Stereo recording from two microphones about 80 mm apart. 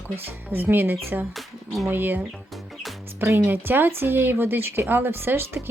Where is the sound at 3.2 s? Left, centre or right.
Right.